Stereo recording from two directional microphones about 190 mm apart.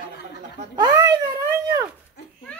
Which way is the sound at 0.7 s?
20° right (ahead or behind).